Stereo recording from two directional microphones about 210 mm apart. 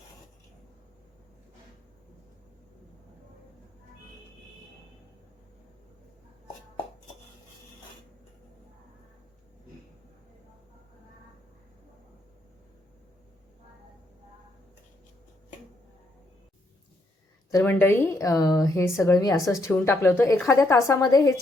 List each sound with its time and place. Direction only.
17.5 s speech: 10° left (ahead or behind)